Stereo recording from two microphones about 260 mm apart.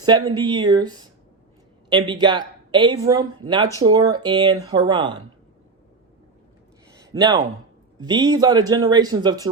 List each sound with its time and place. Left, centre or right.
0.0 s speech: centre
2.0 s speech: centre
7.0 s speech: centre